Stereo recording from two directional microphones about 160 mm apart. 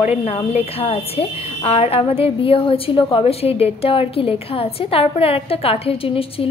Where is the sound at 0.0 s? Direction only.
40° left (ahead or behind).